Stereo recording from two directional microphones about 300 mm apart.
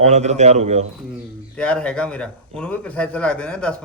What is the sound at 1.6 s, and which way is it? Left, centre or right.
A man's voice, centre.